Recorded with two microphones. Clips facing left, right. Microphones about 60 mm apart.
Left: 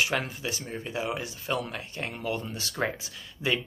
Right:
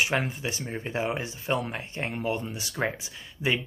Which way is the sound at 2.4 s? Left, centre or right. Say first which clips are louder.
Right 1 dB; centre.